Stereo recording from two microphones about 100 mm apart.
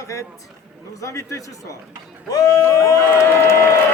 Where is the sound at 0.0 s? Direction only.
30° left (ahead or behind).